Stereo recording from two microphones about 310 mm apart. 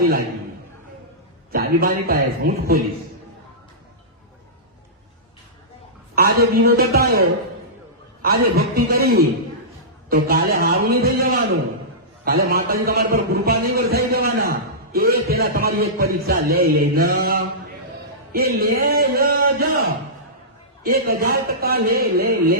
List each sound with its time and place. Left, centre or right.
1.5 s a man's voice: right
6.1 s a man's voice: right
20.8 s a man's voice: right